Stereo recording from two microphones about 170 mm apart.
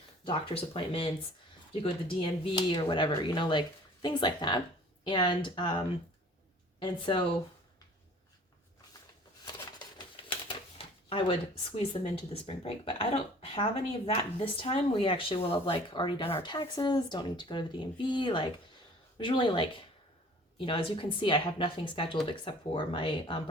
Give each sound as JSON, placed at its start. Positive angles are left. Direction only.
{"t": 0.3, "sound": "speech", "side_deg": 35}
{"t": 9.4, "sound": "a sound", "side_deg": 25}
{"t": 10.5, "sound": "speech", "side_deg": 30}